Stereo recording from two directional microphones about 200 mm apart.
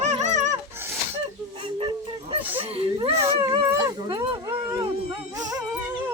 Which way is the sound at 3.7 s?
20° right (ahead or behind).